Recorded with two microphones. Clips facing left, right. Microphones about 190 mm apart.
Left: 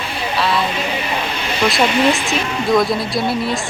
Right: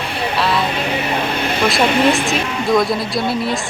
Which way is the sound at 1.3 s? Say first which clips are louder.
Right 2 dB; 55° right (ahead or behind).